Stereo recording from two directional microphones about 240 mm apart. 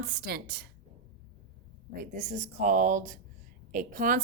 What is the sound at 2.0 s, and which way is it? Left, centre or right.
A woman's voice, right.